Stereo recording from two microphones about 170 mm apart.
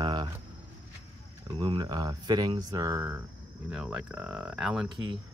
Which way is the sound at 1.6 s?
25° right (ahead or behind).